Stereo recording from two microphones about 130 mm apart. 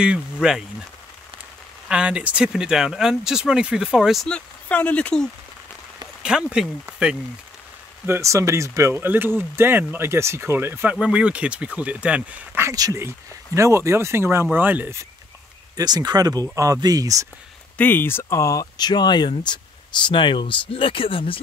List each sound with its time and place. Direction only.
0.0 s speech: 5° right (ahead or behind)
1.9 s speech: 10° right (ahead or behind)
6.2 s speech: 5° right (ahead or behind)
8.1 s speech: 25° right (ahead or behind)
12.7 s speech: 25° right (ahead or behind)
15.7 s speech: 30° right (ahead or behind)
17.7 s speech: 15° left (ahead or behind); by 21.4 s 45° left (ahead or behind)